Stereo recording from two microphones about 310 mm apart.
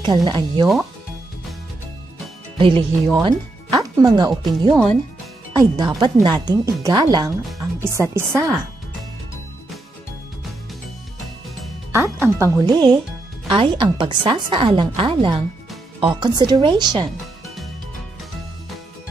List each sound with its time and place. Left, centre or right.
0.0 s speech: centre
2.5 s speech: centre
11.9 s speech: centre